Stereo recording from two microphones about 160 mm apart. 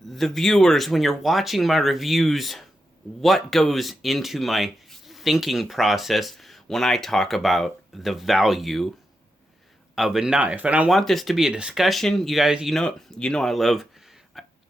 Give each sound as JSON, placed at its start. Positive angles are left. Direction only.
{"t": 0.1, "sound": "speech", "side_deg": 0}
{"t": 9.9, "sound": "speech", "side_deg": 0}
{"t": 14.3, "sound": "a sound", "side_deg": 0}